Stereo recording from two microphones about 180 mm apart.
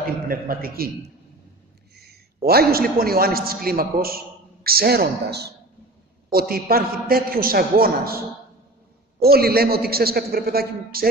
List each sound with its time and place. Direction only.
0.0 s a man's voice: 55° right (ahead or behind)
2.0 s a man's voice: 60° right (ahead or behind)
9.2 s a man's voice: 60° right (ahead or behind)